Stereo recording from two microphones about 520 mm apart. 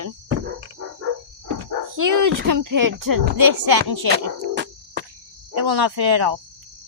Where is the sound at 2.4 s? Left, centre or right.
Right.